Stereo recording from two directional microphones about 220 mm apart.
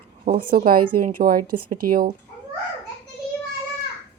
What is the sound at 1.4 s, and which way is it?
Speech, 90° right.